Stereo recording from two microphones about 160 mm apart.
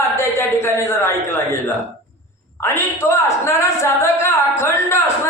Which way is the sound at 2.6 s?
15° left (ahead or behind).